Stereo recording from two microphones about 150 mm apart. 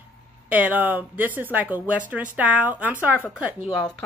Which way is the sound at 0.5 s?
10° right (ahead or behind).